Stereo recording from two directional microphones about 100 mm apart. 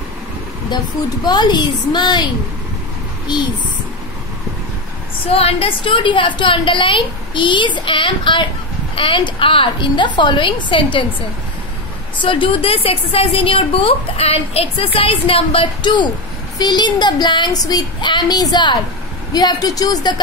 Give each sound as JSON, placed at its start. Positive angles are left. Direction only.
{"t": 1.2, "sound": "speech", "side_deg": 45}
{"t": 5.3, "sound": "a woman's voice", "side_deg": 75}
{"t": 12.2, "sound": "a woman's voice", "side_deg": 60}